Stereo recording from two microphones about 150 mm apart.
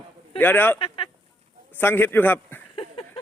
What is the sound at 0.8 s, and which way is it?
Speech, 35° left (ahead or behind).